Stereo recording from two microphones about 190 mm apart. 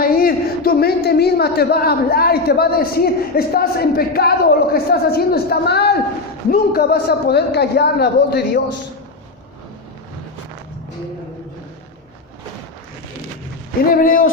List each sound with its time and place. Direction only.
0.0 s speech: 50° left (ahead or behind)
13.9 s speech: 45° left (ahead or behind)